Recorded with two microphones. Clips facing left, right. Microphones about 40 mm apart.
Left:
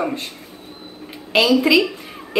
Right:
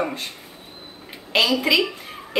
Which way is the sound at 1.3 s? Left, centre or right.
Centre.